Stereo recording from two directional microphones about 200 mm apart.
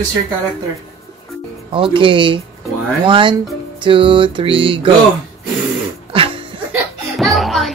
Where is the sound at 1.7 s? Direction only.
25° right (ahead or behind).